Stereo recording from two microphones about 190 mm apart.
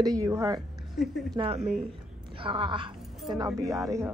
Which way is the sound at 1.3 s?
30° right (ahead or behind).